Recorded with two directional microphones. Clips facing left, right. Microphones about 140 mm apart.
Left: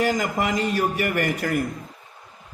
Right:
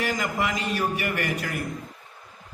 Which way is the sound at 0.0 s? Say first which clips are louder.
Left 4 dB; 50° left (ahead or behind).